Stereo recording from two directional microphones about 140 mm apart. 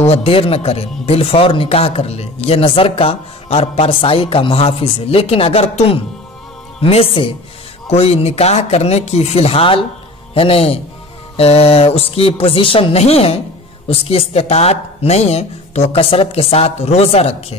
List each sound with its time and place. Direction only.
0.0 s speech: 45° left (ahead or behind)